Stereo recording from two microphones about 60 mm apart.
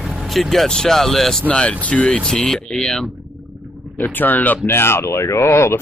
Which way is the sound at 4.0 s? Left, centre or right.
Left.